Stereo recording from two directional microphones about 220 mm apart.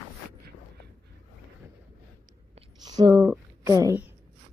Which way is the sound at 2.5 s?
20° right (ahead or behind).